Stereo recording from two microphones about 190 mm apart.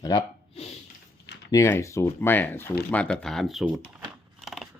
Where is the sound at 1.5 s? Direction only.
15° left (ahead or behind); by 4.0 s 5° right (ahead or behind).